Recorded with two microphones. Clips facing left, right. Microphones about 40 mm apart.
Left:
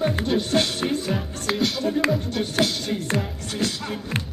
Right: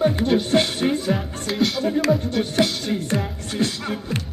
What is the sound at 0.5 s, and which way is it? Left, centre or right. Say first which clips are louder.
Music: right 3 dB; centre.